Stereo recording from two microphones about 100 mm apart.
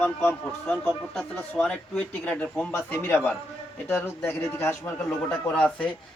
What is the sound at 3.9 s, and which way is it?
Speech, 25° left (ahead or behind).